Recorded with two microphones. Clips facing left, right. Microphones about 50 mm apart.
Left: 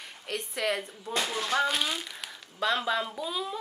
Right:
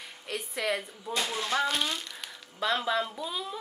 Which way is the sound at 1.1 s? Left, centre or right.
Left.